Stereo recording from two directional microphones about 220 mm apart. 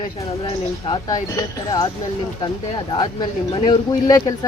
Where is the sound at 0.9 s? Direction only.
15° left (ahead or behind).